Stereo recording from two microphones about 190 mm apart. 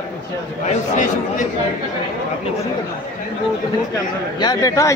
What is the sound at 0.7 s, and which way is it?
Speech, 40° left (ahead or behind).